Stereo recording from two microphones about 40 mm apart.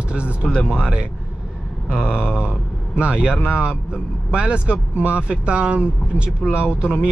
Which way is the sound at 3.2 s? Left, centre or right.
Left.